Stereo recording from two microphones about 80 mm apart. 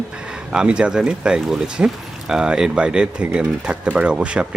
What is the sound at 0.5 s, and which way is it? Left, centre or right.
Speech, centre.